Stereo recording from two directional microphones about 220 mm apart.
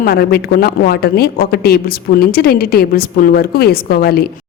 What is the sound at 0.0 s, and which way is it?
A woman's voice, 45° left (ahead or behind).